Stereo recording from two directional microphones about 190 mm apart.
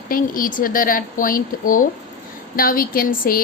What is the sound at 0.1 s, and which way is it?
Speech, 45° left (ahead or behind).